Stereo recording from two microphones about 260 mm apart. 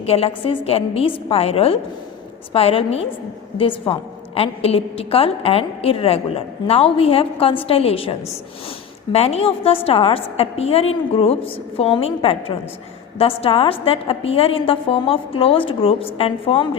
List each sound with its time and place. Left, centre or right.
0.0 s a woman's voice: left
9.1 s a woman's voice: left